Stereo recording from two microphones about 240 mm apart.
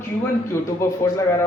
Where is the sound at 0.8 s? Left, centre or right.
Centre.